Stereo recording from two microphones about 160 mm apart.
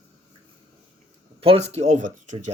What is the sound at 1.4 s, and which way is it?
A man's voice, 40° right (ahead or behind).